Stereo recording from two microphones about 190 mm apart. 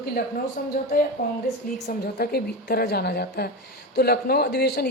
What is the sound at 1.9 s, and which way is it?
A man's voice, 55° left (ahead or behind).